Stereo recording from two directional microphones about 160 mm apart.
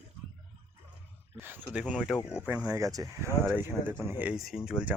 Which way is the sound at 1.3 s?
15° right (ahead or behind).